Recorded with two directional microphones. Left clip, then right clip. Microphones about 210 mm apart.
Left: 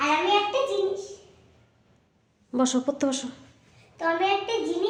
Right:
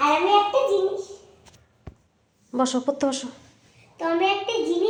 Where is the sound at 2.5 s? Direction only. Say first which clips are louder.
Right 2 dB; 10° left (ahead or behind).